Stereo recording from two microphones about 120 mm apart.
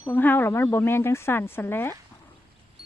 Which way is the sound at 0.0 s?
15° left (ahead or behind).